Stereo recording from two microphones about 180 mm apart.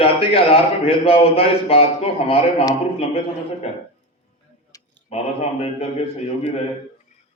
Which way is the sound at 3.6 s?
35° left (ahead or behind).